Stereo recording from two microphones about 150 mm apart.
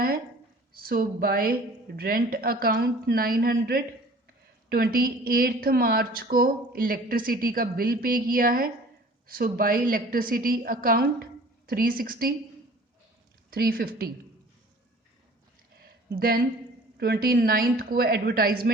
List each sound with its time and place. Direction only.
0.7 s a woman's voice: 85° right
4.7 s a woman's voice: 80° right
13.5 s a woman's voice: 80° right
15.8 s a sound: 80° right
17.0 s a woman's voice: 90° right